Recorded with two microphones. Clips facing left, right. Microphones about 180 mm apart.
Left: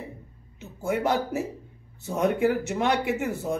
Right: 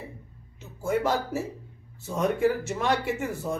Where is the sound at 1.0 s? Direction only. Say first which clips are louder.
Left 2 dB; 15° left (ahead or behind).